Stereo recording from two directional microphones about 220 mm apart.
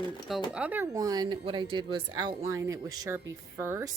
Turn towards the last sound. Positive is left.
turn(degrees=-10)  # may be behind; listen again after turning